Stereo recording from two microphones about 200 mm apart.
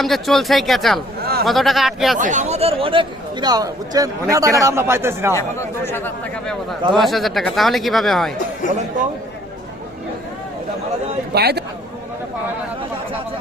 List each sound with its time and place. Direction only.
0.0 s speech: centre (ahead or behind)
1.2 s a sound: 50° right (ahead or behind)
1.5 s speech: centre (ahead or behind)
2.1 s speech: 40° right (ahead or behind); by 5.3 s 10° right (ahead or behind)
5.3 s speech: 15° left (ahead or behind)
11.3 s speech: 55° right (ahead or behind)